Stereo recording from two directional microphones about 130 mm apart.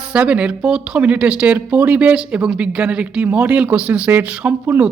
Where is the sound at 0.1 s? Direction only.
10° right (ahead or behind).